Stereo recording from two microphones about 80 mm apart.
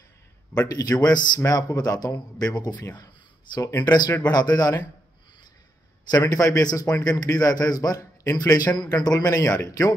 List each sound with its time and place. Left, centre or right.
0.6 s a man's voice: left
1.4 s a man's voice: left
3.8 s speech: left
6.0 s a man's voice: left